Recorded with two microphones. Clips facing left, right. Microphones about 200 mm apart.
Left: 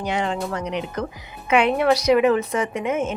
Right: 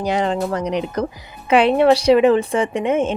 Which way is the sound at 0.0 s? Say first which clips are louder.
Right 5 dB; 35° right (ahead or behind).